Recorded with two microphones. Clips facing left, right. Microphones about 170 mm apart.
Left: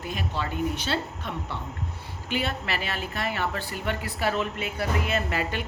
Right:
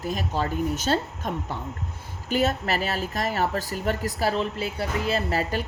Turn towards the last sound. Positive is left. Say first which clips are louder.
# right 2 dB
turn(degrees=-40)  # may be behind; listen again after turning